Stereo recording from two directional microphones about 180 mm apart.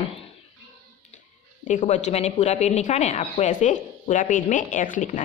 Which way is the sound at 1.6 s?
40° left (ahead or behind).